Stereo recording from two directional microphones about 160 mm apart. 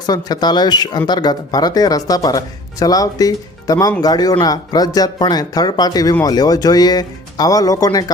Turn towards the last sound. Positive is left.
turn(degrees=20)  # may be behind; listen again after turning